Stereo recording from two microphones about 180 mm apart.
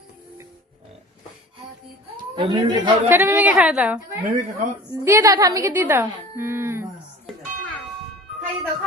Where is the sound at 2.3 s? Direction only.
25° right (ahead or behind).